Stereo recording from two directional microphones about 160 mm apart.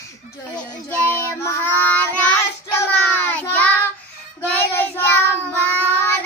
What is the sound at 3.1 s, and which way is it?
Child singing, 10° left (ahead or behind).